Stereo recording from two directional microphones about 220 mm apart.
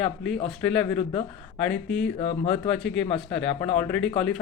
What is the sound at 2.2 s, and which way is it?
Speech, 20° left (ahead or behind).